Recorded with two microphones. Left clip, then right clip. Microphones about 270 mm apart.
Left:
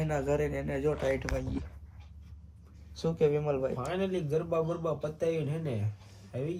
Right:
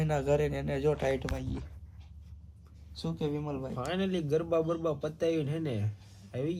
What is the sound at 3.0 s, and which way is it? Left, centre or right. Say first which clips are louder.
Speech: left 8 dB; centre.